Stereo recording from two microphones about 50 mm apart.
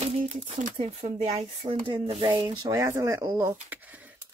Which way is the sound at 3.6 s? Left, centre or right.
Right.